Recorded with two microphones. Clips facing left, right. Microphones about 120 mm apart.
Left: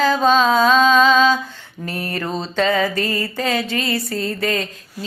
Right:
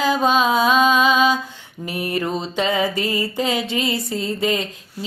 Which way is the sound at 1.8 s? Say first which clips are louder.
Right 2 dB; 15° right (ahead or behind).